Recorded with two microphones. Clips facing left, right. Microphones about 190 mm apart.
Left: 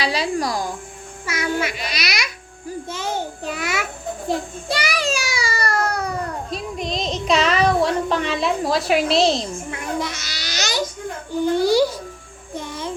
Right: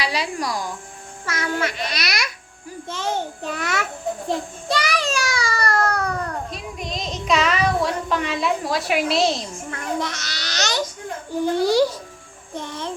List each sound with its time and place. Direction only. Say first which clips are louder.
0.0 s speech: left 3 dB; 30° left (ahead or behind)
1.3 s a child's voice: left 1 dB; 10° left (ahead or behind)
6.5 s child singing: left 5 dB; 30° left (ahead or behind)
9.6 s a child's voice: even; 10° left (ahead or behind)